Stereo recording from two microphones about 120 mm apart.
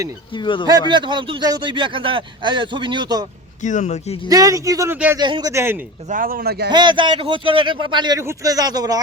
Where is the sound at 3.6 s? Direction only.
90° left.